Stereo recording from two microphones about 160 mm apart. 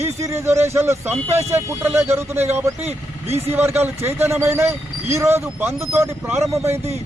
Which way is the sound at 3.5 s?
15° right (ahead or behind).